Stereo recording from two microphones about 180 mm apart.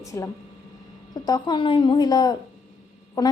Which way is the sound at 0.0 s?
15° left (ahead or behind).